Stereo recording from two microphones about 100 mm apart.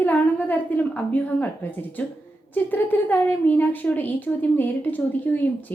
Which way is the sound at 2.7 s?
20° left (ahead or behind).